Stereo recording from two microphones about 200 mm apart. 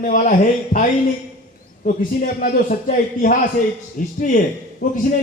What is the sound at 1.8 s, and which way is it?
A man's voice, 45° left (ahead or behind).